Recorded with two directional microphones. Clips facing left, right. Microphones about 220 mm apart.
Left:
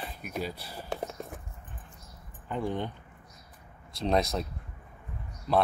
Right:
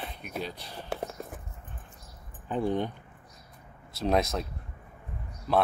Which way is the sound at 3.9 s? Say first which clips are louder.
Right 1 dB; 5° right (ahead or behind).